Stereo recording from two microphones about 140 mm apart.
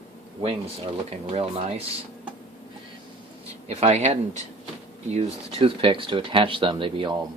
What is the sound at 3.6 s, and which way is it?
Speech, 55° right (ahead or behind).